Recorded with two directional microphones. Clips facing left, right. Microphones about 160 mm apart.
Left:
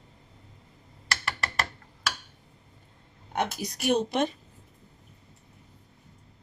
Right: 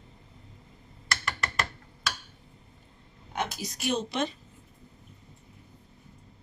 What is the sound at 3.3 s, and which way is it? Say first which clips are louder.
Speech: left 3 dB; 60° left (ahead or behind).